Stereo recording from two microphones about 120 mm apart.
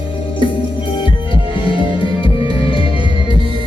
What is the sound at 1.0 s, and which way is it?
Music, 45° left (ahead or behind).